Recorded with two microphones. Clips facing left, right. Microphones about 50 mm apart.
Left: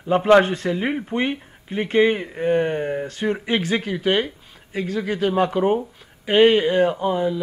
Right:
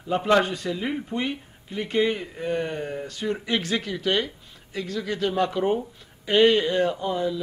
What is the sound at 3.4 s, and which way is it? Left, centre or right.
Speech, left.